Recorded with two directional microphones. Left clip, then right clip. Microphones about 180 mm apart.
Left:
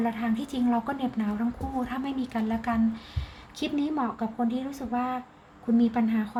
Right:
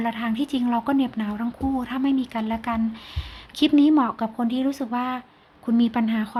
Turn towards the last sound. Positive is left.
turn(degrees=-45)  # may be behind; listen again after turning